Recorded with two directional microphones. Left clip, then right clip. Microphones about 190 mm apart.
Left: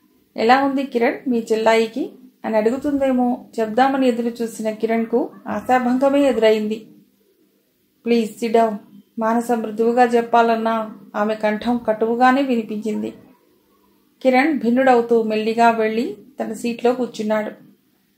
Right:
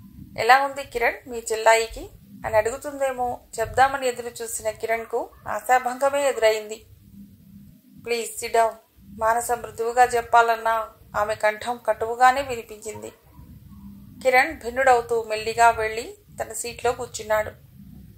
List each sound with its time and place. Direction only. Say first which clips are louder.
0.3 s a woman's voice: left 2 dB; 30° right (ahead or behind)
8.0 s a woman's voice: left 7 dB; 30° right (ahead or behind)
14.2 s a woman's voice: left 3 dB; 30° right (ahead or behind)